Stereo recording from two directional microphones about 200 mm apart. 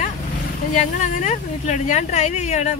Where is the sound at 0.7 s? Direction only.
35° left (ahead or behind).